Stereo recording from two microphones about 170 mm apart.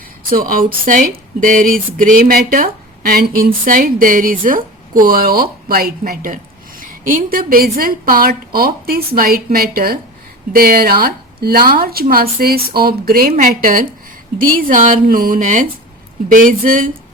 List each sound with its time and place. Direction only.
0.3 s speech: 55° right (ahead or behind)